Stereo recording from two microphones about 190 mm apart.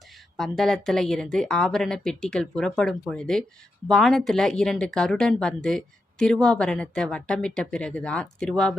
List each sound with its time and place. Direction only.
0.3 s speech: centre (ahead or behind)